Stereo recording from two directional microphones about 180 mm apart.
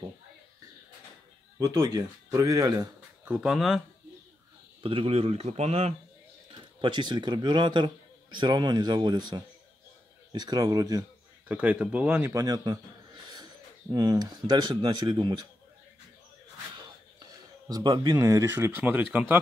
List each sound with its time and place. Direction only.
1.6 s speech: 20° right (ahead or behind)
3.3 s speech: 5° right (ahead or behind)
4.8 s speech: 30° right (ahead or behind)
6.5 s a man's voice: 25° right (ahead or behind)
10.3 s speech: 20° right (ahead or behind)
11.5 s a man's voice: 10° right (ahead or behind); by 15.4 s 25° right (ahead or behind)
16.7 s speech: 20° right (ahead or behind)